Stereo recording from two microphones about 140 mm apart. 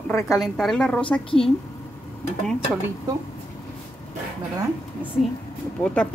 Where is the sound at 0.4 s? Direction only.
Centre (ahead or behind).